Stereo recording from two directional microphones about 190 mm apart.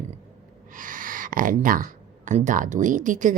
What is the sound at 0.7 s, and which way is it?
Speech, 45° right (ahead or behind).